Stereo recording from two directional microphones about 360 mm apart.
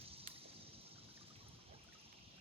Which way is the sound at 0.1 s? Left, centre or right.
Centre.